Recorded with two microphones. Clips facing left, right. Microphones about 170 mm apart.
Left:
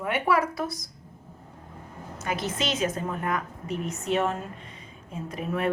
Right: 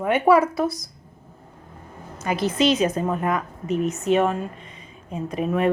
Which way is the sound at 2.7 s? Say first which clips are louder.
Right 6 dB; 20° right (ahead or behind).